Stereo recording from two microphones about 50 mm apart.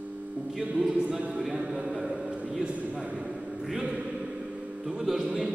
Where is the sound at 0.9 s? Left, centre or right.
Right.